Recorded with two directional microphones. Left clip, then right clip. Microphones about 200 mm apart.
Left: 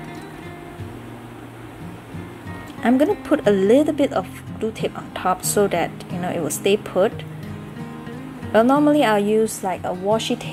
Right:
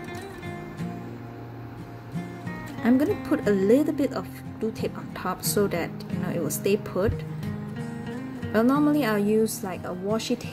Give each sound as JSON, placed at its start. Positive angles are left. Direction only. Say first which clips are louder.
{"t": 2.8, "sound": "speech", "louder": "left 6 dB", "side_deg": -25}
{"t": 8.5, "sound": "speech", "louder": "left 7 dB", "side_deg": -25}